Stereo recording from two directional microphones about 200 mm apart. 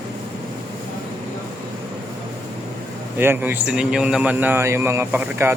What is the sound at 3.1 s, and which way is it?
A man's voice, 10° right (ahead or behind).